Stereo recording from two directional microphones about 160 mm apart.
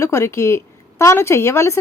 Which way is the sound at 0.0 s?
20° left (ahead or behind).